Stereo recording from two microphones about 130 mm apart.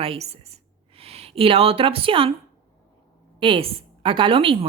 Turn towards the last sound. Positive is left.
turn(degrees=-45)  # may be behind; listen again after turning